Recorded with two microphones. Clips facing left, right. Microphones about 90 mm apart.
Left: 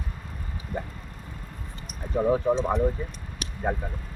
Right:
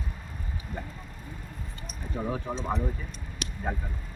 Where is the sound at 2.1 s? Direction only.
25° left (ahead or behind).